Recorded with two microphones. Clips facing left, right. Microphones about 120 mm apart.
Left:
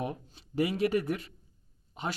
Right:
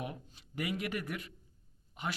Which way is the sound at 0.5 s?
30° left (ahead or behind).